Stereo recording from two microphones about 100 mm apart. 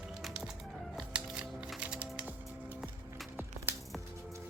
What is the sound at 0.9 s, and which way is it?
Music, 10° right (ahead or behind).